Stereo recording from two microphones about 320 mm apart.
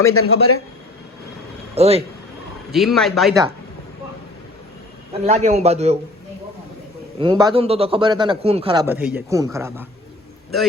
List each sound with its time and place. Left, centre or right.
0.2 s a man's voice: left
1.7 s a man's voice: centre
2.7 s a man's voice: centre
5.1 s a man's voice: right
7.2 s a man's voice: centre